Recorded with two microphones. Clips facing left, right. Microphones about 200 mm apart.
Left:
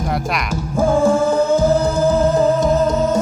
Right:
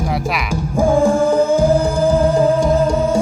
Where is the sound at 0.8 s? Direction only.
15° right (ahead or behind).